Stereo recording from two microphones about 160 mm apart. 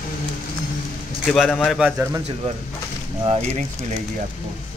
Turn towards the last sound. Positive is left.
turn(degrees=-45)  # may be behind; listen again after turning